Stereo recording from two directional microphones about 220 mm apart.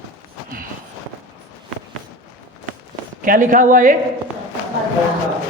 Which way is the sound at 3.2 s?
40° right (ahead or behind).